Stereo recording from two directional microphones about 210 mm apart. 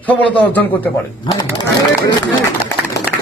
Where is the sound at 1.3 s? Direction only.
20° left (ahead or behind).